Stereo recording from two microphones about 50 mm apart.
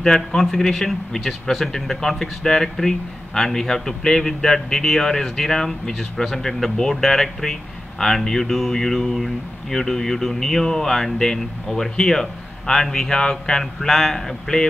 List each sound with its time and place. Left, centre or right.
0.0 s speech: centre